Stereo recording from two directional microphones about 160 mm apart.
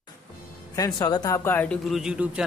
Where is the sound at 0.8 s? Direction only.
25° left (ahead or behind); by 2.4 s 5° right (ahead or behind).